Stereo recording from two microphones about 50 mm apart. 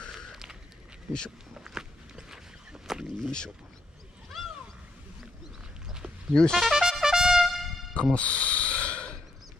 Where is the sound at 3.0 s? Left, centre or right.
Centre.